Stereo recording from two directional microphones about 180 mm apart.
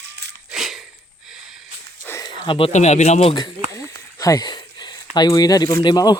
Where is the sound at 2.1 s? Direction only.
20° left (ahead or behind).